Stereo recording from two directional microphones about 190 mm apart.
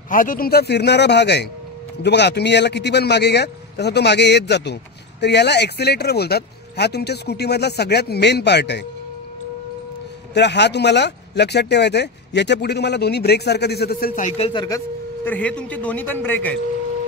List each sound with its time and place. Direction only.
0.1 s speech: 45° left (ahead or behind); by 8.8 s 65° left (ahead or behind)
10.3 s speech: 65° left (ahead or behind); by 14.3 s 50° left (ahead or behind)
14.3 s speech: 30° left (ahead or behind)
15.2 s a man's voice: 5° left (ahead or behind)